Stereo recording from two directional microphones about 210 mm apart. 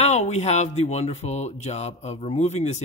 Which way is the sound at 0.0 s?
30° left (ahead or behind).